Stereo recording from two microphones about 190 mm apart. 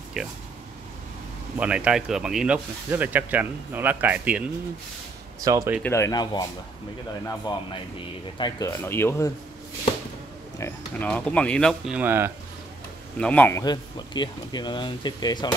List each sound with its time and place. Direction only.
0.2 s speech: centre (ahead or behind)
1.6 s speech: 5° right (ahead or behind)
5.8 s speech: 15° left (ahead or behind)
7.5 s speech: 20° left (ahead or behind)
10.6 s speech: 10° left (ahead or behind); by 12.3 s 10° right (ahead or behind)
13.2 s speech: 5° left (ahead or behind)